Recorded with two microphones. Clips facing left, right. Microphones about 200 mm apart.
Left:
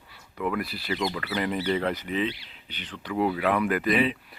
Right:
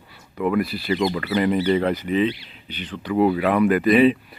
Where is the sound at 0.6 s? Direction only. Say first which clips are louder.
Right 7 dB; 15° right (ahead or behind).